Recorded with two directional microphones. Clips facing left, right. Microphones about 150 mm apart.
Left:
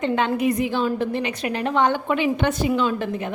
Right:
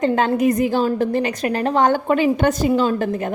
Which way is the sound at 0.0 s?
40° right (ahead or behind).